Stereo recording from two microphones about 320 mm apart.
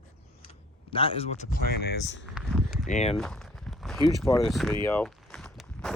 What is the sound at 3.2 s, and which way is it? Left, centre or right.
Speech, centre.